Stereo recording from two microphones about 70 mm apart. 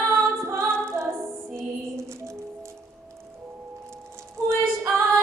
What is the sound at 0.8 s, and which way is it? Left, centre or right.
Music, right.